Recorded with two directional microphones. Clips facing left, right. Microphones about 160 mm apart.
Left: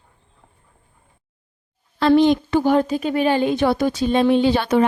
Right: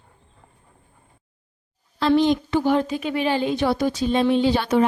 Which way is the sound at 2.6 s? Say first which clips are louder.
Left 3 dB; 45° left (ahead or behind).